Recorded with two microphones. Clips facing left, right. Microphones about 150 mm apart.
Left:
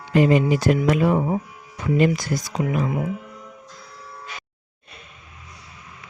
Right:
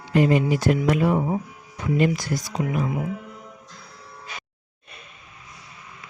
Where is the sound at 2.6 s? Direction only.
60° left (ahead or behind).